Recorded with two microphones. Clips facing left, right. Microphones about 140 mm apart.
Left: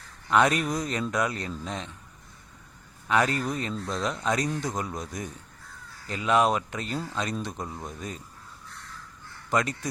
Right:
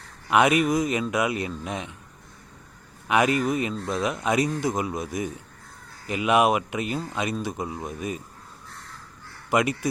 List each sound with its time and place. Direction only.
0.3 s speech: 10° right (ahead or behind)
3.1 s speech: 10° right (ahead or behind)
9.5 s speech: 10° right (ahead or behind)